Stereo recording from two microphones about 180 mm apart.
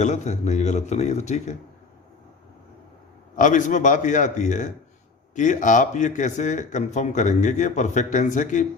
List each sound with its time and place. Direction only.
0.0 s a man's voice: 40° left (ahead or behind)
3.3 s speech: 45° left (ahead or behind)